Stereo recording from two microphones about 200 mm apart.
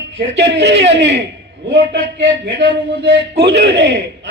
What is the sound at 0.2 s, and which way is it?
A man's voice, 60° right (ahead or behind).